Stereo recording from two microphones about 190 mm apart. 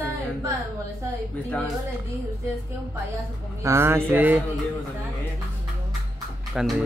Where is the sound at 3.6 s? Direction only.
15° right (ahead or behind).